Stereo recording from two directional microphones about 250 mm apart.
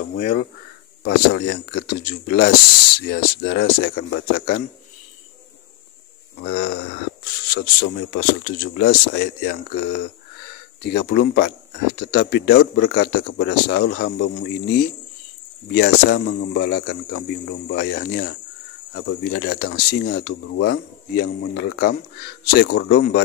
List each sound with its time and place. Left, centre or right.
0.2 s speech: left
6.3 s speech: left